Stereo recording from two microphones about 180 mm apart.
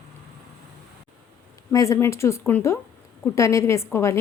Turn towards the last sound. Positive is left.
turn(degrees=15)  # may be behind; listen again after turning